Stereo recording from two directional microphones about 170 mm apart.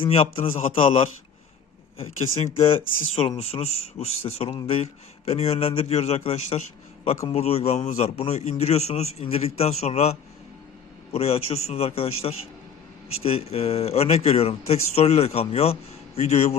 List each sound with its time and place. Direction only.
0.0 s speech: 35° left (ahead or behind)
2.5 s speech: 35° left (ahead or behind)
11.1 s speech: 35° left (ahead or behind)